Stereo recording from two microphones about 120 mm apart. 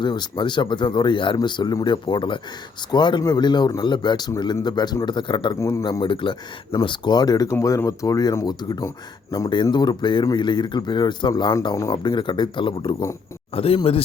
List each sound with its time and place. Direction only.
0.0 s speech: 40° left (ahead or behind)
5.5 s speech: 25° left (ahead or behind)
5.8 s speech: 40° left (ahead or behind)
13.5 s speech: 55° left (ahead or behind)